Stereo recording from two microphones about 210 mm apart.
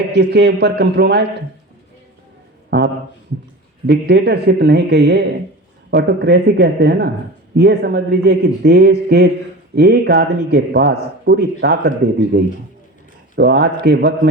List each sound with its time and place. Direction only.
0.1 s a man's voice: 55° right (ahead or behind)
2.6 s a sound: 50° right (ahead or behind)
3.8 s a man's voice: 50° right (ahead or behind)